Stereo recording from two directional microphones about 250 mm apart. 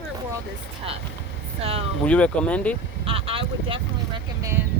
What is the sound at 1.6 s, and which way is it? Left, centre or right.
Speech, right.